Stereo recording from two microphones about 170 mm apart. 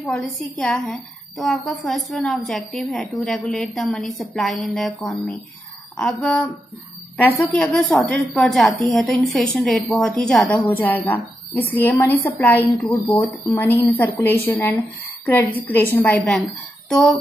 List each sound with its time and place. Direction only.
0.0 s a woman's voice: 5° left (ahead or behind)